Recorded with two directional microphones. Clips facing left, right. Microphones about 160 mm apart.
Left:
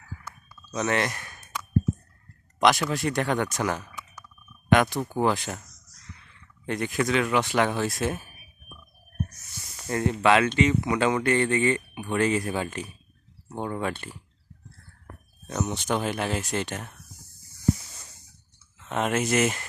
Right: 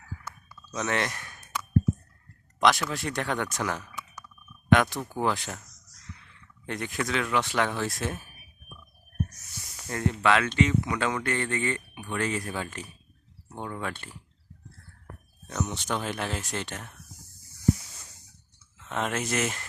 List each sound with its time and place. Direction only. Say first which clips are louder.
0.8 s speech: left 3 dB; 5° left (ahead or behind)
2.6 s speech: left 2 dB; centre (ahead or behind)
6.7 s speech: left 5 dB; 5° left (ahead or behind)
9.9 s speech: left 3 dB; 15° left (ahead or behind)
15.4 s speech: left 3 dB; 15° left (ahead or behind)
18.9 s speech: left 5 dB; 10° left (ahead or behind)